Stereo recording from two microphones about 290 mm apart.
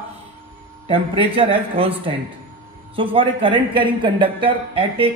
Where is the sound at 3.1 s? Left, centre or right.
Centre.